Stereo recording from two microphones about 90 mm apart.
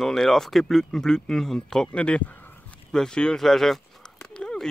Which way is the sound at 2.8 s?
5° left (ahead or behind).